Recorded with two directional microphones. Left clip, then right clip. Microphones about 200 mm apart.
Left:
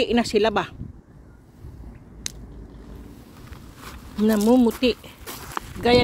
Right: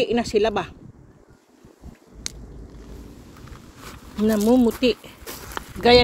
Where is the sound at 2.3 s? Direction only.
15° left (ahead or behind).